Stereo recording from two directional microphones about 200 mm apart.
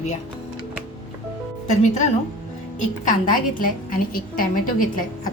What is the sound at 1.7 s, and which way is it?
Music, 35° left (ahead or behind).